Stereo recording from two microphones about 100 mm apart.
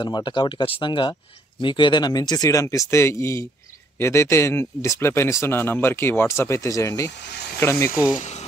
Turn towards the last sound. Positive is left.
turn(degrees=25)  # may be behind; listen again after turning